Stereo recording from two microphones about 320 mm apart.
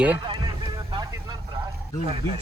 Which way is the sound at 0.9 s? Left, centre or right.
Centre.